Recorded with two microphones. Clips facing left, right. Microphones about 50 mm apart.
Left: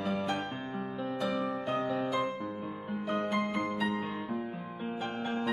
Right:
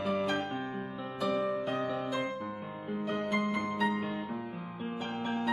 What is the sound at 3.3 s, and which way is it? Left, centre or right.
Music, left.